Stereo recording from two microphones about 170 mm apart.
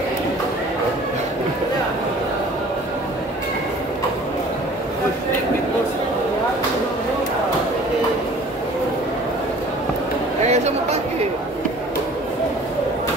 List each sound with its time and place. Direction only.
10.4 s chatter: 40° right (ahead or behind)